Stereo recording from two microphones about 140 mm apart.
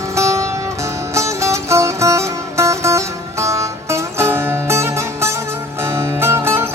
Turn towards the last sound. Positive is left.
turn(degrees=-15)  # may be behind; listen again after turning